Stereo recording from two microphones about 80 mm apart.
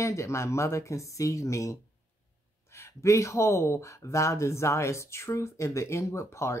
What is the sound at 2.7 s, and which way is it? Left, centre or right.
Speech, left.